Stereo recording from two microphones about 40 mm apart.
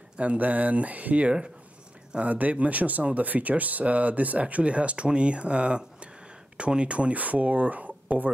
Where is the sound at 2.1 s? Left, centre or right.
Right.